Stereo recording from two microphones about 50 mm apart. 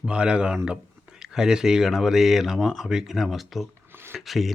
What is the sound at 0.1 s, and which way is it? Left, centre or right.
Speech, centre.